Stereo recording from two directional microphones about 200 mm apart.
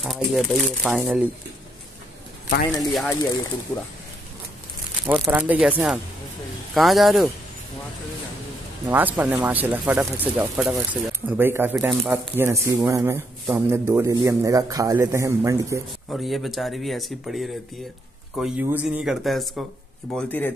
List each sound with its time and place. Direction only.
0.0 s speech: centre (ahead or behind)
2.9 s speech: centre (ahead or behind)
5.3 s speech: 10° right (ahead or behind)
8.8 s speech: 10° right (ahead or behind)
16.1 s speech: centre (ahead or behind)